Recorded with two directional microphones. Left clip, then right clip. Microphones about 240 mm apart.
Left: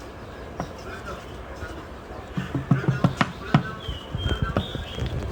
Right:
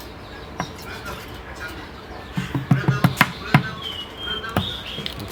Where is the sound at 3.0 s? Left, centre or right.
Centre.